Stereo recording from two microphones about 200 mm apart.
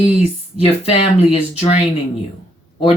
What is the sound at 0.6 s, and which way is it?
Speech, 30° left (ahead or behind).